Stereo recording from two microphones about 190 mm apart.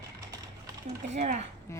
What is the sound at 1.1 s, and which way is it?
Speech, 35° right (ahead or behind).